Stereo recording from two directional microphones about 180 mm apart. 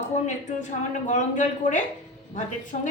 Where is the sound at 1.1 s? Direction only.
45° left (ahead or behind).